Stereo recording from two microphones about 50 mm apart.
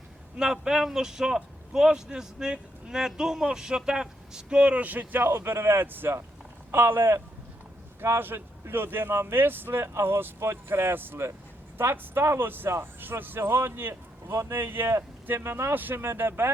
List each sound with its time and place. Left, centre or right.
0.3 s speech: centre; by 5.3 s right
5.3 s speech: right
12.5 s speech: right
14.3 s speech: right
14.5 s speech: right
15.7 s speech: right